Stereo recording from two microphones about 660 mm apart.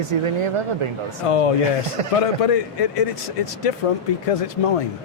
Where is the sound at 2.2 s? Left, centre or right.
Left.